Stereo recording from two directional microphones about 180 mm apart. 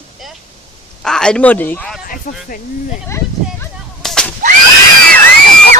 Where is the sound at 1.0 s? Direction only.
5° left (ahead or behind).